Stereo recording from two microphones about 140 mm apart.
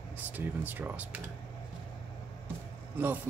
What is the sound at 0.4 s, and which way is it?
Speech, 15° right (ahead or behind).